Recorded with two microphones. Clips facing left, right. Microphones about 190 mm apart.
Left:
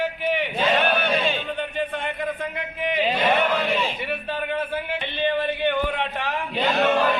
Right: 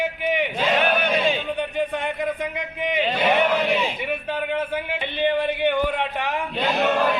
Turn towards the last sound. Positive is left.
turn(degrees=-5)  # may be behind; listen again after turning